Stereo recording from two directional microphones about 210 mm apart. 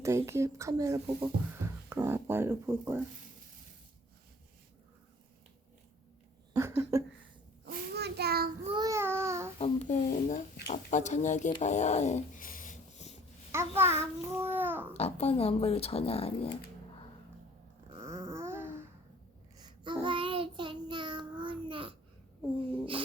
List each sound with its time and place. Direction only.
0.0 s a child's voice: 15° right (ahead or behind)
6.5 s a sound: 10° right (ahead or behind)
7.6 s child singing: 50° right (ahead or behind)
8.6 s babbling: 20° right (ahead or behind)
9.6 s a sound: 30° left (ahead or behind)
13.5 s a child's voice: 10° right (ahead or behind)
14.9 s speech: 30° left (ahead or behind)
18.0 s babbling: 15° right (ahead or behind)
19.6 s child singing: 20° right (ahead or behind)